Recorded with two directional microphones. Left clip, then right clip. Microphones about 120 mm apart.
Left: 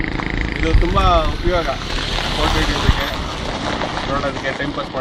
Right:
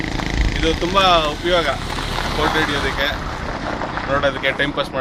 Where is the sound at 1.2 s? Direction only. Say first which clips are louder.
Right 2 dB; 50° right (ahead or behind).